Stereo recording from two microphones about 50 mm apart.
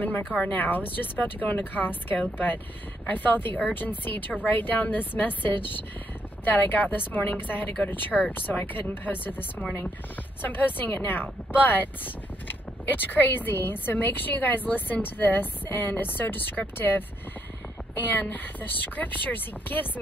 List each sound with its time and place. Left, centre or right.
0.0 s a woman's voice: left
18.1 s a woman's voice: left